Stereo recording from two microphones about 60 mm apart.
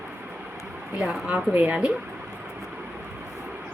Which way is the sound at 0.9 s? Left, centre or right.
Centre.